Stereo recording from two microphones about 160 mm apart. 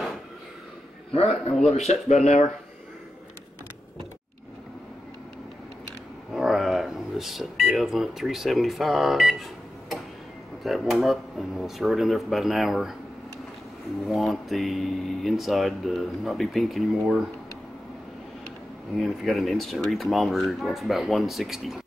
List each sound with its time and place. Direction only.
1.1 s a man's voice: 40° left (ahead or behind)
6.3 s speech: centre (ahead or behind)
14.0 s speech: centre (ahead or behind)
18.9 s speech: centre (ahead or behind)